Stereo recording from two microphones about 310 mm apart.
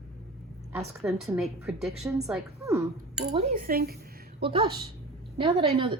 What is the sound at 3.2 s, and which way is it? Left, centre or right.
Speech, right.